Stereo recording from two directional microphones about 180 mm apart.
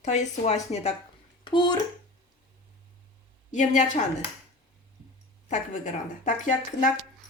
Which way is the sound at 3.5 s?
45° left (ahead or behind).